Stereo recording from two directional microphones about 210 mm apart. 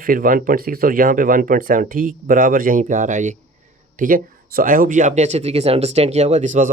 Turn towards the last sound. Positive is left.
turn(degrees=-35)  # may be behind; listen again after turning